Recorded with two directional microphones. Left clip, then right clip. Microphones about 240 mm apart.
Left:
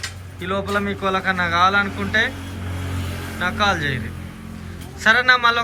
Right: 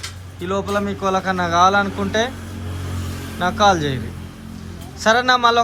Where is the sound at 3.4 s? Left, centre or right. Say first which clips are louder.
Right 4 dB; centre.